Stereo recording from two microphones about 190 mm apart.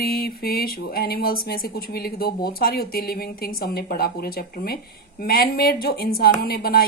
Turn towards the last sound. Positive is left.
turn(degrees=55)  # may be behind; listen again after turning